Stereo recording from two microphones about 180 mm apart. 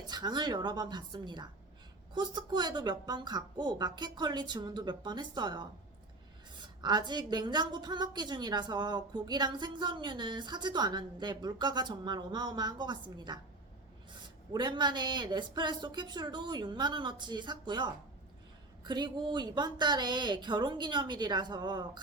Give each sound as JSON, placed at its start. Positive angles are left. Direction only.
{"t": 0.1, "sound": "a woman's voice", "side_deg": -25}